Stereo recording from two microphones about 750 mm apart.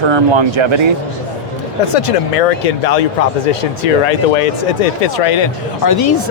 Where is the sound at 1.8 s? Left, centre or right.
Left.